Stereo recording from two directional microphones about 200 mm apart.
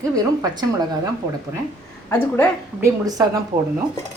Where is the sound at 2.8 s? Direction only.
20° right (ahead or behind).